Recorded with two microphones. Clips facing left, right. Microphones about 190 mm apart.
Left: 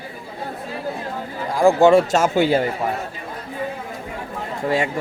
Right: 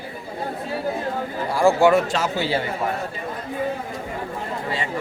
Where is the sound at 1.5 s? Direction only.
15° left (ahead or behind).